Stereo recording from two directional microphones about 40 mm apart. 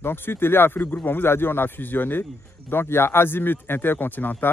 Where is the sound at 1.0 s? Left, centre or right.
Left.